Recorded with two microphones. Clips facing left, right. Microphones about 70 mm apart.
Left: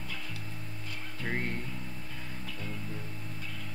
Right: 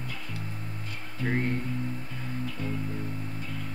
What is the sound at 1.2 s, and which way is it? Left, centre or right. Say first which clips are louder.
Music: right 6 dB; centre.